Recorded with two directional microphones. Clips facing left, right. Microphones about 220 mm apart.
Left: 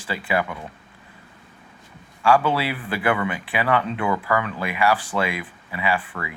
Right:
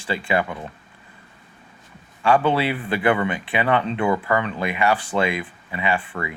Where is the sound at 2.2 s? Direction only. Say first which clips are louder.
Right 1 dB; 20° right (ahead or behind).